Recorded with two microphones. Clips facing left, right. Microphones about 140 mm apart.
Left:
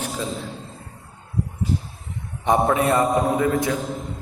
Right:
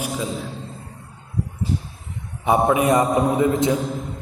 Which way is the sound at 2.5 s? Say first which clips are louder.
Right 2 dB; 10° right (ahead or behind).